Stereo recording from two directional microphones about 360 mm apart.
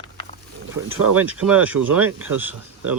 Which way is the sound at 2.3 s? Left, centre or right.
Right.